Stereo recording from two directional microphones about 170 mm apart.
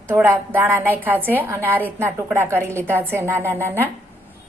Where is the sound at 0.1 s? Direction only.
10° right (ahead or behind).